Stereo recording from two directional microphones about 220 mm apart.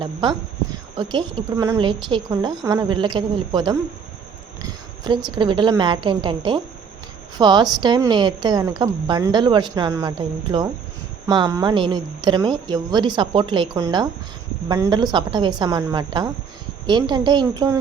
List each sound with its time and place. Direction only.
0.0 s a woman's voice: 20° right (ahead or behind)